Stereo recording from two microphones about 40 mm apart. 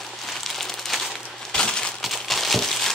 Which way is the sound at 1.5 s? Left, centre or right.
Left.